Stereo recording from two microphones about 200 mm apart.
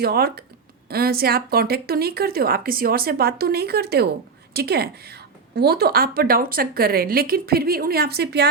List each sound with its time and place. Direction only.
0.0 s a woman's voice: 50° right (ahead or behind)